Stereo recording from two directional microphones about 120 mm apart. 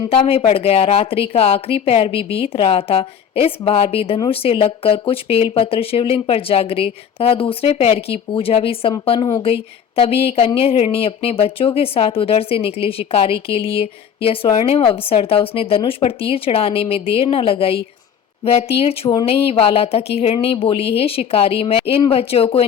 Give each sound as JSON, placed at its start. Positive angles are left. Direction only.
{"t": 0.1, "sound": "a woman's voice", "side_deg": 55}